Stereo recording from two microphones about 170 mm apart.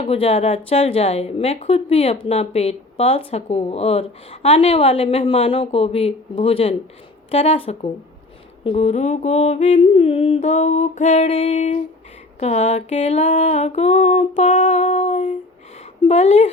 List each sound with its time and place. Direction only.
0.0 s speech: 35° left (ahead or behind)
11.3 s speech: 35° left (ahead or behind)
12.4 s music: 40° left (ahead or behind)
16.0 s speech: 40° left (ahead or behind)